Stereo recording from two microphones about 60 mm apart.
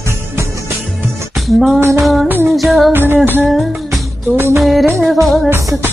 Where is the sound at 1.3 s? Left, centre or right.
Centre.